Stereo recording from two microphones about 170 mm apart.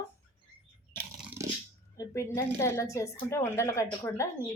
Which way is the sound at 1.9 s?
20° left (ahead or behind).